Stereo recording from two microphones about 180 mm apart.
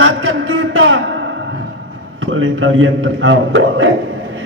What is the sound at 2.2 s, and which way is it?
A man's voice, 90° right.